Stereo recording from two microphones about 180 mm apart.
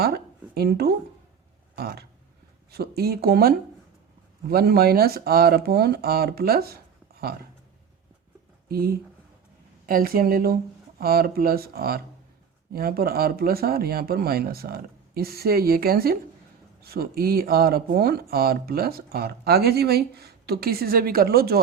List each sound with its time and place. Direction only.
0.0 s a sound: 60° right (ahead or behind)
1.7 s speech: 60° right (ahead or behind)
8.7 s speech: 55° right (ahead or behind)